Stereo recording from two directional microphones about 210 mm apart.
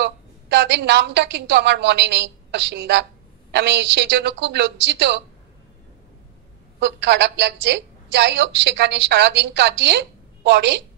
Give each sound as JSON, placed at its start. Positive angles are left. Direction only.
{"t": 0.0, "sound": "a woman's voice", "side_deg": -55}
{"t": 6.8, "sound": "a woman's voice", "side_deg": -55}